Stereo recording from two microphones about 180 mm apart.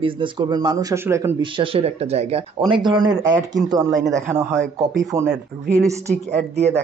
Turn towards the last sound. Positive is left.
turn(degrees=-40)  # may be behind; listen again after turning